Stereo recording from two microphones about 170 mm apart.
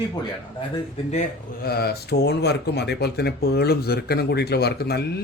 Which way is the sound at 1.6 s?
70° left (ahead or behind).